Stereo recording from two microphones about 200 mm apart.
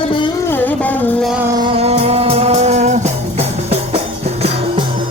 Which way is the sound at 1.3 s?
10° right (ahead or behind).